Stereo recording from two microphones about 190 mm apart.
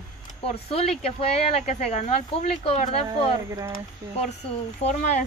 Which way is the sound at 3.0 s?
15° right (ahead or behind).